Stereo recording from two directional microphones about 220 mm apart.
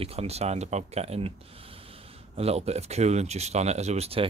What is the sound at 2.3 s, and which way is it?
Speech, 30° right (ahead or behind).